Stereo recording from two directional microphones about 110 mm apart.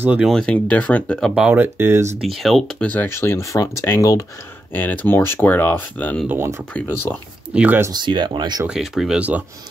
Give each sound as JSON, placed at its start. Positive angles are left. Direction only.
{"t": 0.0, "sound": "speech", "side_deg": -10}
{"t": 0.3, "sound": "speech", "side_deg": 5}
{"t": 1.3, "sound": "speech", "side_deg": -10}
{"t": 1.6, "sound": "speech", "side_deg": -20}
{"t": 2.1, "sound": "speech", "side_deg": 0}
{"t": 2.9, "sound": "speech", "side_deg": 20}
{"t": 4.7, "sound": "speech", "side_deg": 15}
{"t": 6.2, "sound": "speech", "side_deg": -25}
{"t": 6.7, "sound": "speech", "side_deg": 15}
{"t": 7.5, "sound": "speech", "side_deg": -15}
{"t": 7.9, "sound": "speech", "side_deg": -45}
{"t": 8.6, "sound": "speech", "side_deg": -5}